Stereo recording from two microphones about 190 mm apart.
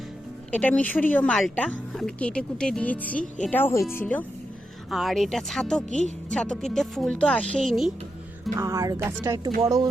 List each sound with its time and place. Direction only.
0.5 s speech: 10° left (ahead or behind)
8.5 s music: 15° right (ahead or behind)
9.6 s speech: 20° right (ahead or behind)